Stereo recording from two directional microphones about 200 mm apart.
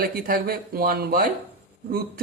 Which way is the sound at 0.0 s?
45° right (ahead or behind).